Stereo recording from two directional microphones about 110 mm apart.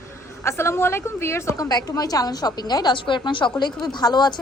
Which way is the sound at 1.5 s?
35° left (ahead or behind).